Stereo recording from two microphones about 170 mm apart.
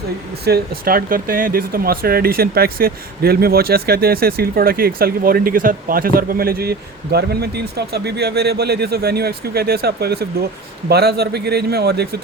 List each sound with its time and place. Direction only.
0.4 s a man's voice: 65° right (ahead or behind)